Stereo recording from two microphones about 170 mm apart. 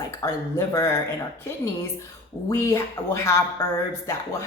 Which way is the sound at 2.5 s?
15° left (ahead or behind).